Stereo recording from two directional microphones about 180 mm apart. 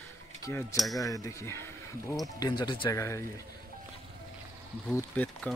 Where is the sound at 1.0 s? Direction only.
20° left (ahead or behind).